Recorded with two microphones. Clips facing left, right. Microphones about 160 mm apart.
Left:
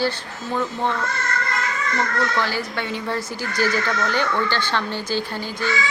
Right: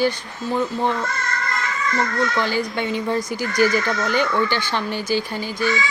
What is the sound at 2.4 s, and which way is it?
Speech, 20° right (ahead or behind).